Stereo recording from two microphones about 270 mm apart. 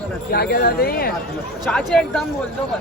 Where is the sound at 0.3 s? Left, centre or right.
Left.